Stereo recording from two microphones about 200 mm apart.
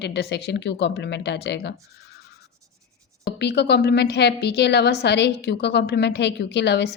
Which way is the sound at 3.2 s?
55° left (ahead or behind).